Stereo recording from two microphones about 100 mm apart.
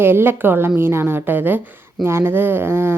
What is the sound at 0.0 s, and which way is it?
A woman's voice, 20° right (ahead or behind).